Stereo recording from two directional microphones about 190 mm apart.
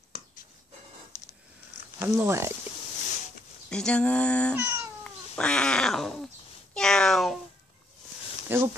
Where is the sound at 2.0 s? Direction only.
15° right (ahead or behind).